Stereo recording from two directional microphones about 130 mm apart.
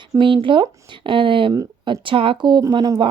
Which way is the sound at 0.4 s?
40° right (ahead or behind).